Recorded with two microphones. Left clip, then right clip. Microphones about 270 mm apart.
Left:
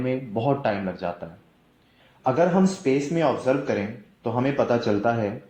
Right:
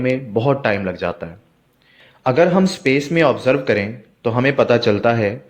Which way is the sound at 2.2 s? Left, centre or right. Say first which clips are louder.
Right 6 dB; right.